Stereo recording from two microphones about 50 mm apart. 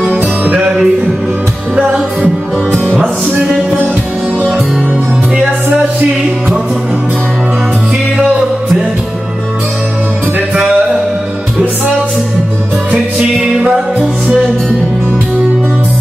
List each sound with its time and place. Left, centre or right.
0.6 s music: centre
10.5 s music: right
13.4 s music: centre